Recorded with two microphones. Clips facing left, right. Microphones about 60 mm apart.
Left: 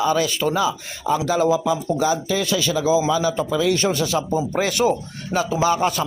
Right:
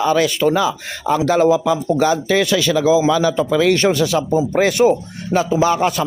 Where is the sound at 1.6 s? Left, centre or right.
Right.